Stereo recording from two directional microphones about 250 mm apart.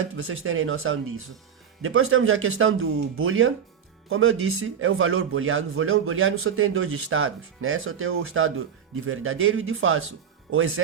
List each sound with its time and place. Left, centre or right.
0.0 s a man's voice: right